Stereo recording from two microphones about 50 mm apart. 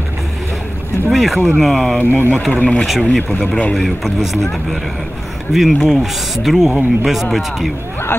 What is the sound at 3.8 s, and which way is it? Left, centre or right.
Speech, centre.